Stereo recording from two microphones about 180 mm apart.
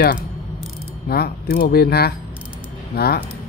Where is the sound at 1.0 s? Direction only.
60° left (ahead or behind).